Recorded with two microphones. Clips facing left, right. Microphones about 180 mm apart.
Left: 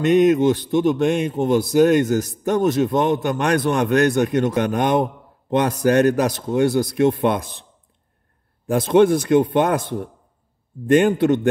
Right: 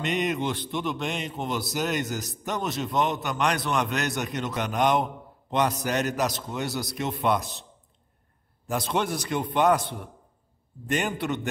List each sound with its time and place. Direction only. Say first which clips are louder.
0.0 s speech: left 13 dB; 50° left (ahead or behind)
8.6 s speech: left 13 dB; 50° left (ahead or behind)